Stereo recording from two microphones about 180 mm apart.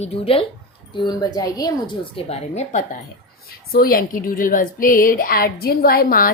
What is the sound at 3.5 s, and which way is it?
Speech, 55° left (ahead or behind).